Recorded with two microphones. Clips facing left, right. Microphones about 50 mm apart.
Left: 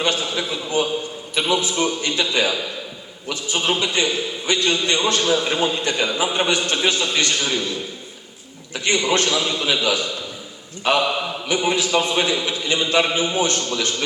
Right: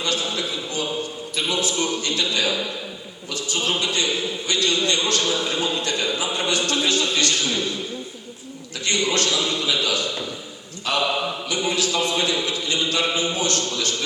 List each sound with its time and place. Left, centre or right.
0.0 s a man's voice: left
8.7 s a man's voice: left
11.4 s a man's voice: left